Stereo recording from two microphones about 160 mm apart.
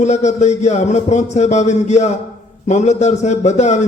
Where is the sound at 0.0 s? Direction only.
45° left (ahead or behind).